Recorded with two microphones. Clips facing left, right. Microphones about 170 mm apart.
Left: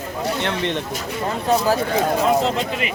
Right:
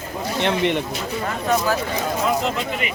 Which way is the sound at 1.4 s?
35° left (ahead or behind).